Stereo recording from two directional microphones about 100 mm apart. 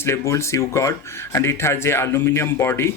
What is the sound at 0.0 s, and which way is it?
Speech, 30° left (ahead or behind).